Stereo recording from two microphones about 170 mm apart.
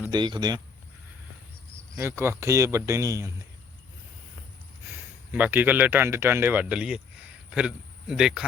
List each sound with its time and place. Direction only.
0.1 s speech: 25° right (ahead or behind)
2.0 s speech: 15° right (ahead or behind)
5.3 s speech: 10° right (ahead or behind)